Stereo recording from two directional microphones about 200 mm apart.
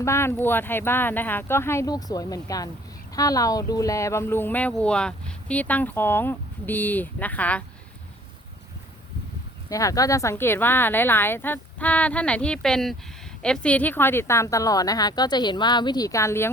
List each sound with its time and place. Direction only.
0.0 s speech: 15° left (ahead or behind)
9.6 s speech: 15° left (ahead or behind)